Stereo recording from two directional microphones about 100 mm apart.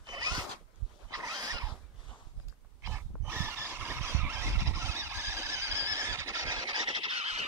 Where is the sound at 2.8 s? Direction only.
25° right (ahead or behind); by 7.4 s 90° right.